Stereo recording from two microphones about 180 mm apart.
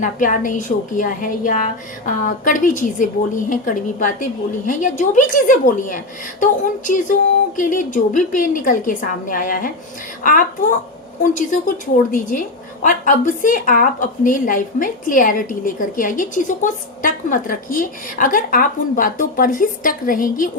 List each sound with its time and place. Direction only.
0.0 s a woman's voice: 45° left (ahead or behind)